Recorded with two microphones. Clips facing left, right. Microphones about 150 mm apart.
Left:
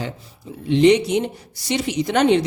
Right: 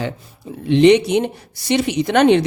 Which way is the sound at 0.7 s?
65° right (ahead or behind).